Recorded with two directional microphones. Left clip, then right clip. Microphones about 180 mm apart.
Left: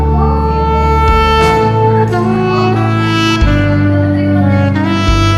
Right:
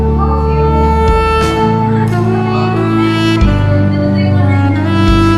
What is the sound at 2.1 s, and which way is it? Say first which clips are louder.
Saxophone: left 2 dB; centre (ahead or behind).